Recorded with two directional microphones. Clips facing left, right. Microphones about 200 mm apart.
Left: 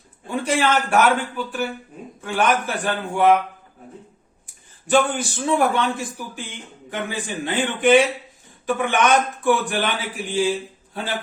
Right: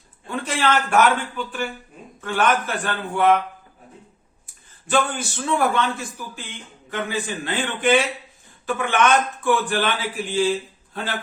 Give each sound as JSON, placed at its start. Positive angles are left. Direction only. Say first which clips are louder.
{"t": 0.3, "sound": "a man's voice", "louder": "left 2 dB", "side_deg": 10}
{"t": 4.9, "sound": "a man's voice", "louder": "left 3 dB", "side_deg": 15}